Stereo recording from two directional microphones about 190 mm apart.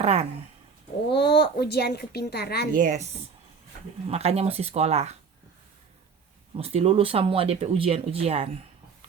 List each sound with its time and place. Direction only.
0.0 s speech: 35° right (ahead or behind)
1.1 s speech: 60° left (ahead or behind)
2.7 s speech: 40° right (ahead or behind)
4.1 s speech: 35° right (ahead or behind)
6.5 s speech: 30° right (ahead or behind)